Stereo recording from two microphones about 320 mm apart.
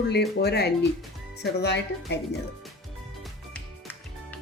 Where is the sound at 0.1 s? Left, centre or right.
Left.